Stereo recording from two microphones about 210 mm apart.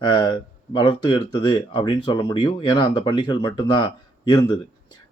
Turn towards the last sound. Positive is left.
turn(degrees=20)  # may be behind; listen again after turning